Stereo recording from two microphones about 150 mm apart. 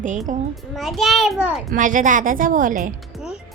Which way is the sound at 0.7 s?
Centre (ahead or behind).